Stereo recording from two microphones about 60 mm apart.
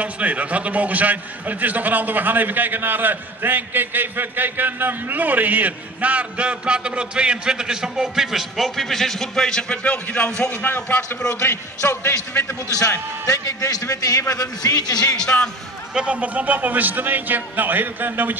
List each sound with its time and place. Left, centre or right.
0.0 s a man's voice: right; by 10.5 s centre
10.6 s a man's voice: left
11.9 s a man's voice: left
13.3 s a man's voice: left
14.3 s speech: left
15.1 s speech: centre
15.9 s a man's voice: centre; by 18.4 s right